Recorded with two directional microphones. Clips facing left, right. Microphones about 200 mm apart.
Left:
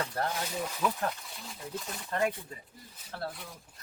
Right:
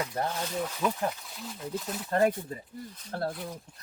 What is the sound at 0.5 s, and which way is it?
Speech, centre (ahead or behind).